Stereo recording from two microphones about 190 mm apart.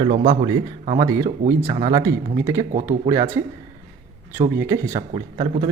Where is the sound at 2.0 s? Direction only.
15° right (ahead or behind).